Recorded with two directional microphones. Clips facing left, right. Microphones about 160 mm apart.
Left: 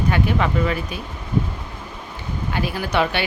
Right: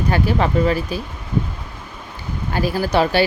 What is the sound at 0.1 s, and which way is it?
Speech, 35° right (ahead or behind).